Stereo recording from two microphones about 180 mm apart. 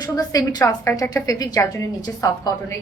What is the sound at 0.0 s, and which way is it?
A woman's voice, 20° left (ahead or behind).